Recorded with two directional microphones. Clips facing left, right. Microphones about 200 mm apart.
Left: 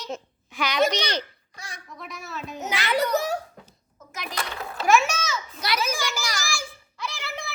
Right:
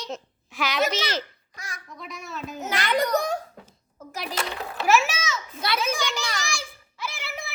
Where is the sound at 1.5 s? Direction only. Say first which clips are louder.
Right 1 dB; 30° left (ahead or behind).